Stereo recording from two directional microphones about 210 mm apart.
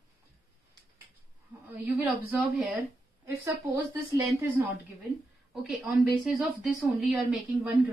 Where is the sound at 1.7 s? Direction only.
5° right (ahead or behind).